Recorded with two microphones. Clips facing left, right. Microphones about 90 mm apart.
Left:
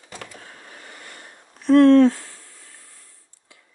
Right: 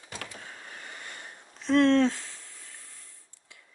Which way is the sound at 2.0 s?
20° left (ahead or behind).